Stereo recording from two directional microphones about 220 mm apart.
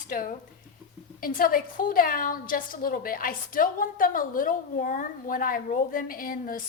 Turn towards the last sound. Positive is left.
turn(degrees=40)  # may be behind; listen again after turning